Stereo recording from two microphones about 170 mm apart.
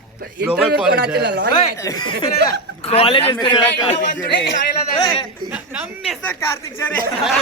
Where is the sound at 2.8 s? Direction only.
35° left (ahead or behind).